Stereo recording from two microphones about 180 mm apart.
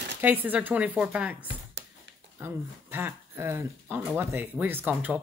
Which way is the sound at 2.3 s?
10° right (ahead or behind).